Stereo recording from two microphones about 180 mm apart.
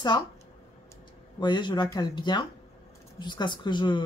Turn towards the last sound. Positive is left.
turn(degrees=25)  # may be behind; listen again after turning